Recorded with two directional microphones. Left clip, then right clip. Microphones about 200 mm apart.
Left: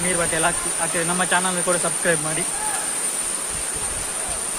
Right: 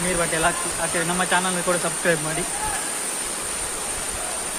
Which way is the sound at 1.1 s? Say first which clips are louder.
Left 1 dB; 5° left (ahead or behind).